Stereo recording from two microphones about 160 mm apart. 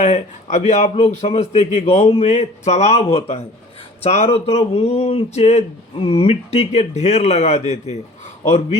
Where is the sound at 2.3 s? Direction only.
45° left (ahead or behind).